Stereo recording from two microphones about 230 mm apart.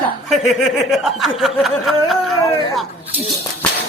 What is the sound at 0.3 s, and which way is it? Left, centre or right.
Speech, centre.